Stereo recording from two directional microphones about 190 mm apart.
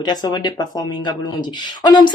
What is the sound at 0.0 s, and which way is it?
Speech, 20° left (ahead or behind).